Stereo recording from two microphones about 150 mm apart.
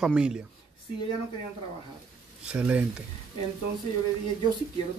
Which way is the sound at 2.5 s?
10° right (ahead or behind).